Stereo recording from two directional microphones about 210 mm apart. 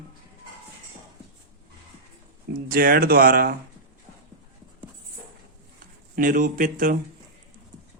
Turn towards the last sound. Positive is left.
turn(degrees=-40)  # may be behind; listen again after turning